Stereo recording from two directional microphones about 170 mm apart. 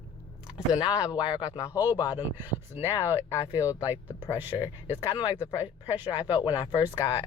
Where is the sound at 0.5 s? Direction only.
25° left (ahead or behind).